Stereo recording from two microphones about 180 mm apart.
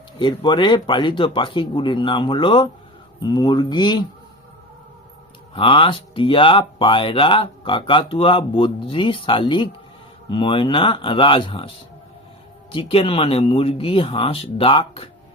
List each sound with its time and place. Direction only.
0.2 s speech: 25° left (ahead or behind)
5.5 s speech: 30° left (ahead or behind)
12.7 s speech: 30° left (ahead or behind)